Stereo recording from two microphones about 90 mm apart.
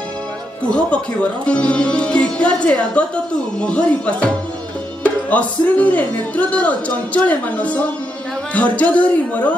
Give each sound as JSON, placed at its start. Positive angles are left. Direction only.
{"t": 0.7, "sound": "speech", "side_deg": 10}